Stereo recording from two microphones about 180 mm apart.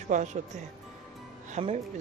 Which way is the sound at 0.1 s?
45° right (ahead or behind).